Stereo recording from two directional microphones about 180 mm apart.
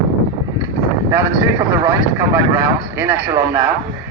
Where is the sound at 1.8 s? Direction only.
15° right (ahead or behind).